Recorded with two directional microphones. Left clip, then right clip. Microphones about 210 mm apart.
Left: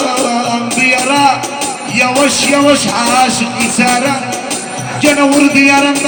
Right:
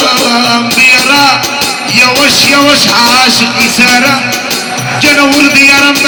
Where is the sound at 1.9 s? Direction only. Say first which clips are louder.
Right 5 dB; 55° left (ahead or behind).